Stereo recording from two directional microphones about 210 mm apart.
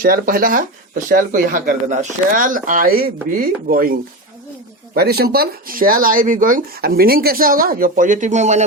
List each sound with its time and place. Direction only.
0.0 s speech: 40° right (ahead or behind)
4.9 s speech: 45° right (ahead or behind)